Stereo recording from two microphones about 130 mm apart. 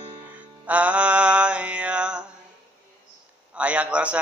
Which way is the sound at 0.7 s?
10° right (ahead or behind).